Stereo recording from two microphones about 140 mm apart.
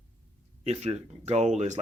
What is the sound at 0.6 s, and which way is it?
Speech, 50° right (ahead or behind).